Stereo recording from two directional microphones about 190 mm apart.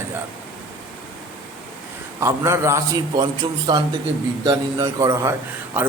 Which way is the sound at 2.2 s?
15° right (ahead or behind).